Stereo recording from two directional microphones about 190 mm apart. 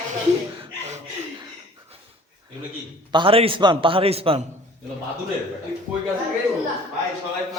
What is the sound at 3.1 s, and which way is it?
A man's voice, 25° right (ahead or behind).